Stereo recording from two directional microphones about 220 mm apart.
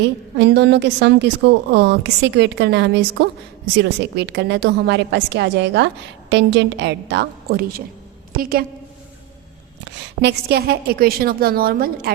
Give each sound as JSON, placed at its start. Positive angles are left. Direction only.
{"t": 0.0, "sound": "a woman's voice", "side_deg": -50}
{"t": 9.8, "sound": "a woman's voice", "side_deg": -50}